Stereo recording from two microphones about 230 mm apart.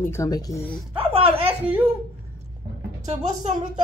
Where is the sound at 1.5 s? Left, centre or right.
Centre.